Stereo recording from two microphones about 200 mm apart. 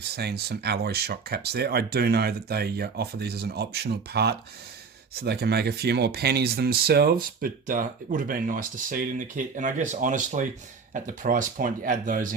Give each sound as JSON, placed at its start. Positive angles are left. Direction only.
{"t": 0.2, "sound": "speech", "side_deg": -55}